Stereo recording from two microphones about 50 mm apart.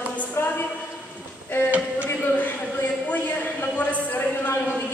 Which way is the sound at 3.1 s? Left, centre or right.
Left.